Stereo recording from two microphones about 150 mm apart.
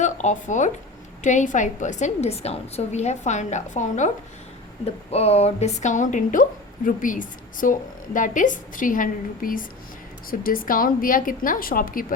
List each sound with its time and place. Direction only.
0.0 s a woman's voice: 55° left (ahead or behind)
5.1 s a woman's voice: 45° left (ahead or behind); by 12.0 s 70° left (ahead or behind)